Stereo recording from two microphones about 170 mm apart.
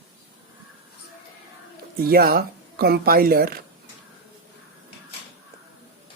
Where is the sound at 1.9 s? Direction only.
60° right (ahead or behind).